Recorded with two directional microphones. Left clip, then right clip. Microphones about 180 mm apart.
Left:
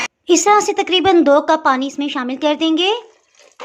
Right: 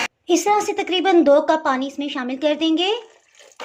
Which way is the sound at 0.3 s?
20° left (ahead or behind).